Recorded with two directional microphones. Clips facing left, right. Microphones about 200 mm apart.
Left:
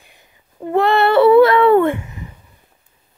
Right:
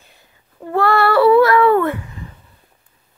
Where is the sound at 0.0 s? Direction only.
15° left (ahead or behind).